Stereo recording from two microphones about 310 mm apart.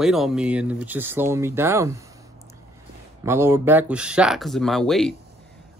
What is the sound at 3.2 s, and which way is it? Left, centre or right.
Speech, centre.